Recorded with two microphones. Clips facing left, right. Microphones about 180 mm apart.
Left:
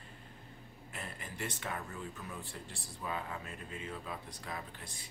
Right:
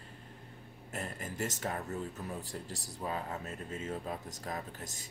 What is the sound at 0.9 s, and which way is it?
Speech, 45° right (ahead or behind).